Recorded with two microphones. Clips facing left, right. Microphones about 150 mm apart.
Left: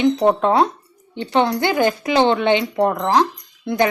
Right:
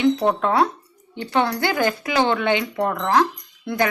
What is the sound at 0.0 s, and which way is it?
Speech, 25° left (ahead or behind).